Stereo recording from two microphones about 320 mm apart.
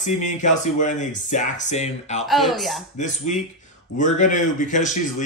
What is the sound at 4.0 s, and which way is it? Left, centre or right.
Speech, left.